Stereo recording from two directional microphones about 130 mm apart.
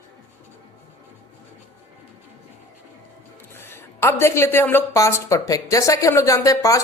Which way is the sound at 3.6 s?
20° left (ahead or behind).